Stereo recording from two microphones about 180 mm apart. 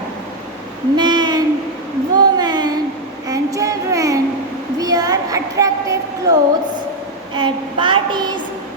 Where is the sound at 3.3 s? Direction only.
20° right (ahead or behind).